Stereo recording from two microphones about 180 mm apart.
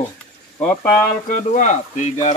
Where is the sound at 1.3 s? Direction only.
45° left (ahead or behind).